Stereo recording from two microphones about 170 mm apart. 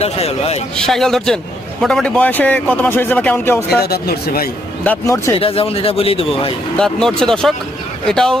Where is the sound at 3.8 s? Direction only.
65° left (ahead or behind).